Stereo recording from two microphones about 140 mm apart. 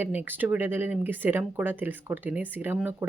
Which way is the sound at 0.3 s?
15° right (ahead or behind).